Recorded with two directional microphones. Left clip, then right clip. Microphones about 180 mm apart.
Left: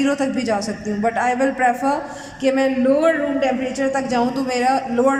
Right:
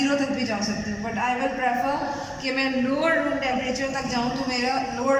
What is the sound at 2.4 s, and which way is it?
A woman's voice, 45° left (ahead or behind).